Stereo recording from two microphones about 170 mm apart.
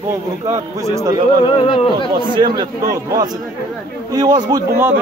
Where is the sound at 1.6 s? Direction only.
30° left (ahead or behind).